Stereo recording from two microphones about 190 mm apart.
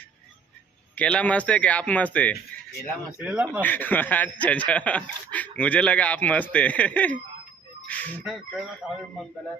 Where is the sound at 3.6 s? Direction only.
10° left (ahead or behind).